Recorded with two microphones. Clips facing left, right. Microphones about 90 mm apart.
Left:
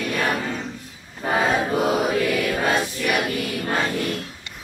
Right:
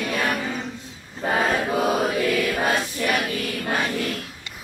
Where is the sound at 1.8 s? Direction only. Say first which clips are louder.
Left 1 dB; 20° left (ahead or behind).